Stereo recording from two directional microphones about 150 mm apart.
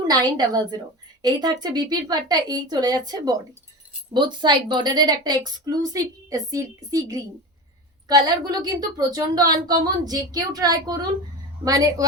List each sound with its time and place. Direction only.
0.1 s a woman's voice: 25° right (ahead or behind)